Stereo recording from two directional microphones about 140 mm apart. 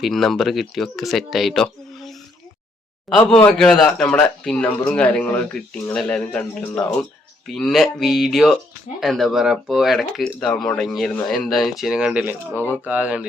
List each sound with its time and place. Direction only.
0.0 s a man's voice: centre (ahead or behind)